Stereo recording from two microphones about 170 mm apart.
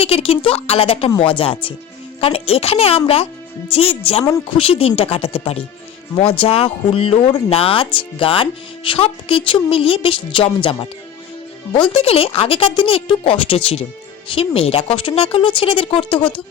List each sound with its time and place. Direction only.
0.0 s speech: 35° left (ahead or behind)